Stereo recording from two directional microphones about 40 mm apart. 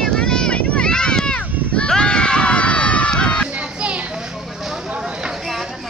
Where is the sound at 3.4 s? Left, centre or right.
Right.